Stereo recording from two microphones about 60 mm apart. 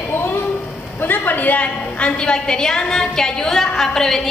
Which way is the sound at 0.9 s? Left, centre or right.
Left.